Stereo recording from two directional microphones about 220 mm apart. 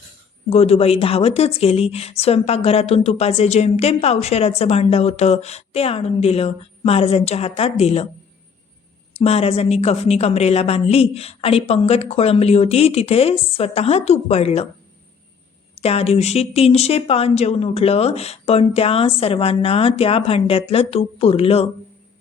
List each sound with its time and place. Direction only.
0.5 s speech: 30° left (ahead or behind)
9.2 s speech: 25° left (ahead or behind)
15.7 s speech: 25° left (ahead or behind)